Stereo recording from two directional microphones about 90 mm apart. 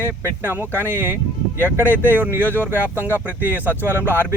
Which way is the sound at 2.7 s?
20° right (ahead or behind).